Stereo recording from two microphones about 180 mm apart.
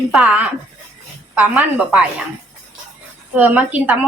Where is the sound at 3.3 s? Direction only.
10° right (ahead or behind).